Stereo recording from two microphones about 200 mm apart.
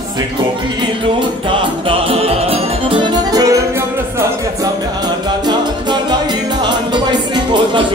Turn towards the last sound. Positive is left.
turn(degrees=-25)  # may be behind; listen again after turning